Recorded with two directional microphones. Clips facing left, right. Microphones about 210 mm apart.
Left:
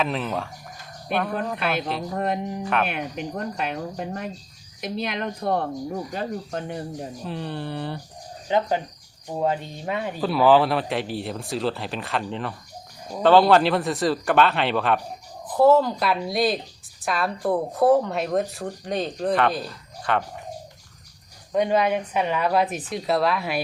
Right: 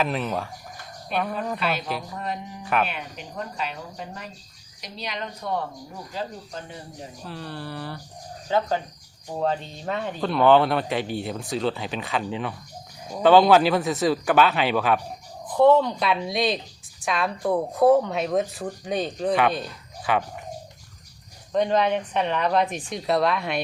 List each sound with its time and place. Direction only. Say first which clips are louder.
0.0 s a woman's voice: even; centre (ahead or behind)
2.0 s speech: left 7 dB; 55° left (ahead or behind)
7.3 s a woman's voice: left 3 dB; 20° left (ahead or behind); by 20.2 s centre (ahead or behind)
21.5 s a woman's voice: left 1 dB; 10° left (ahead or behind)